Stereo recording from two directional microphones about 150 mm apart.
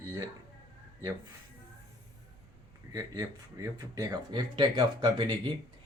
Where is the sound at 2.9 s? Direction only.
20° right (ahead or behind).